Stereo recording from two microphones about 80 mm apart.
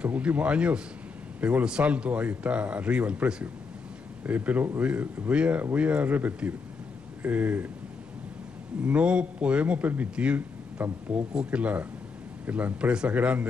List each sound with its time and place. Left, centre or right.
0.0 s a man's voice: centre
8.8 s a man's voice: centre